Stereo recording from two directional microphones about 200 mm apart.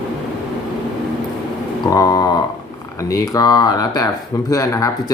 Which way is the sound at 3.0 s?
15° left (ahead or behind).